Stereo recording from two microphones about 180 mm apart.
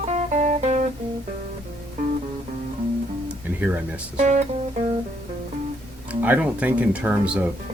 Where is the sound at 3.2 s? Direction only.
10° right (ahead or behind).